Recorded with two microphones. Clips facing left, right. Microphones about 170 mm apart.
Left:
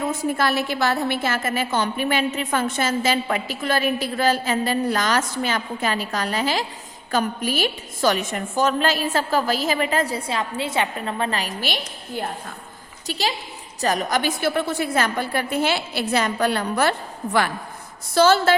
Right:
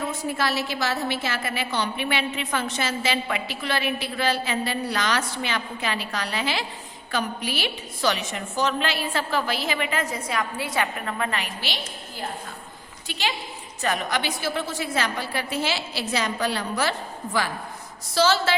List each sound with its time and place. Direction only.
0.0 s a woman's voice: 50° left (ahead or behind)
13.1 s a woman's voice: 40° left (ahead or behind); by 16.9 s 55° left (ahead or behind)
18.1 s a woman's voice: 50° left (ahead or behind)